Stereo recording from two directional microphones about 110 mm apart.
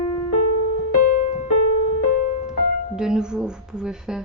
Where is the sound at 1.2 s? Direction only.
80° left.